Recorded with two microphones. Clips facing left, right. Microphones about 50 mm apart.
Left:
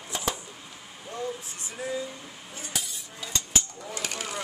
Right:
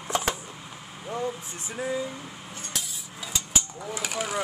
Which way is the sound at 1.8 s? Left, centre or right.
Centre.